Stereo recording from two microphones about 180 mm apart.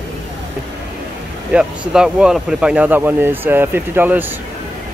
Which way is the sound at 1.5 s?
5° right (ahead or behind).